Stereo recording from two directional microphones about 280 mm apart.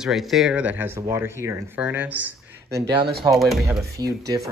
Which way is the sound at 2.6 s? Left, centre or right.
Right.